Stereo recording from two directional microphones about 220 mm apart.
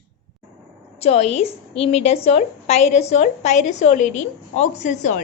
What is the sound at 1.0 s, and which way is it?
A woman's voice, 30° left (ahead or behind).